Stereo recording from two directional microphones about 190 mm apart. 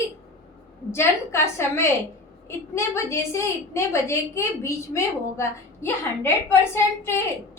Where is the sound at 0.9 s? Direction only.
15° left (ahead or behind).